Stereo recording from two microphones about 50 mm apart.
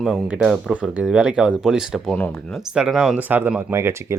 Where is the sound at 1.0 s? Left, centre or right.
Centre.